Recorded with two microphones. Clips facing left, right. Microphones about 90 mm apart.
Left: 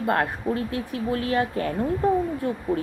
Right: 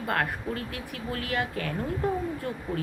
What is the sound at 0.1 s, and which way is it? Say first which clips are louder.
Speech: left 5 dB; 25° left (ahead or behind).